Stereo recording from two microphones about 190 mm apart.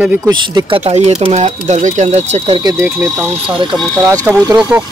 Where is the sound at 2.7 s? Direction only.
10° right (ahead or behind).